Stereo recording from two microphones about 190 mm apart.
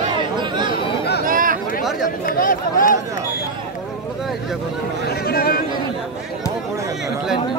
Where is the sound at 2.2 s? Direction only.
45° left (ahead or behind).